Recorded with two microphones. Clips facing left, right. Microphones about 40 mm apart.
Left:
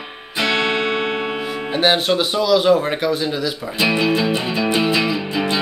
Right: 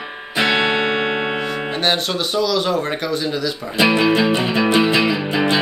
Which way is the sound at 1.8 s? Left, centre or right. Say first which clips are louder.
Left 5 dB; centre.